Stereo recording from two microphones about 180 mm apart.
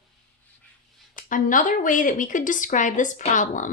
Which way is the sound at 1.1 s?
45° left (ahead or behind).